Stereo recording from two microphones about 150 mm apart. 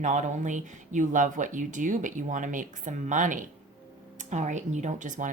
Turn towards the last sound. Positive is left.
turn(degrees=-55)  # may be behind; listen again after turning